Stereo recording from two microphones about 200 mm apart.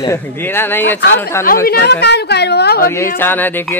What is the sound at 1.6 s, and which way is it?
A woman's voice, 55° left (ahead or behind).